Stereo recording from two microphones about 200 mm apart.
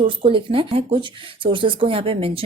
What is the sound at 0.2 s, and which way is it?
A woman's voice, 25° right (ahead or behind).